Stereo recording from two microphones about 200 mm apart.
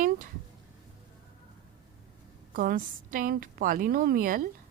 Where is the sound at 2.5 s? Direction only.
45° right (ahead or behind).